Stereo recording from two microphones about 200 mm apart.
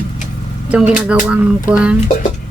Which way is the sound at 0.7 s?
5° right (ahead or behind).